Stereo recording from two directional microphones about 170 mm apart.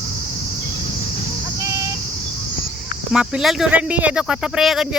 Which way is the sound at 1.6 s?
15° right (ahead or behind).